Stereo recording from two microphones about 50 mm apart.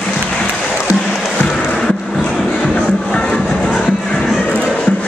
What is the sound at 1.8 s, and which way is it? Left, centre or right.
Music, centre.